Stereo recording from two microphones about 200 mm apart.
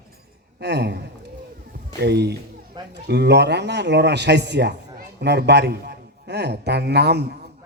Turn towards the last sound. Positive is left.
turn(degrees=-55)  # may be behind; listen again after turning